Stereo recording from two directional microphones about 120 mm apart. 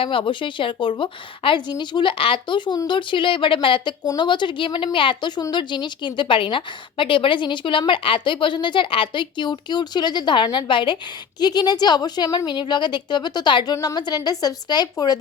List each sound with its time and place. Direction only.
0.0 s a woman's voice: 45° left (ahead or behind)